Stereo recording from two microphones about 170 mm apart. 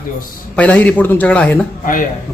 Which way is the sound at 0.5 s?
10° left (ahead or behind).